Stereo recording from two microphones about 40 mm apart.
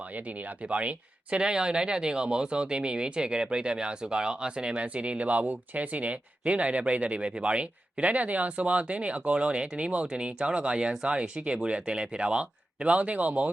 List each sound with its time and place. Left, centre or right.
0.0 s speech: right
1.4 s speech: right